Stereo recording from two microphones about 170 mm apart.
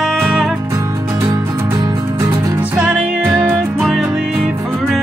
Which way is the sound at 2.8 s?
5° right (ahead or behind).